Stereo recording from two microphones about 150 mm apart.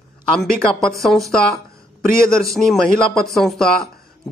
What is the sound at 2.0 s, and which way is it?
Speech, 75° left (ahead or behind).